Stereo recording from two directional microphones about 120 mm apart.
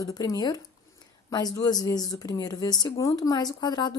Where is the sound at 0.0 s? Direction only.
30° left (ahead or behind).